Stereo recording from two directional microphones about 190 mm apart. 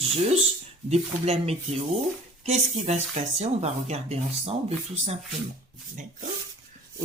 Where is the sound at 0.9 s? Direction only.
35° right (ahead or behind).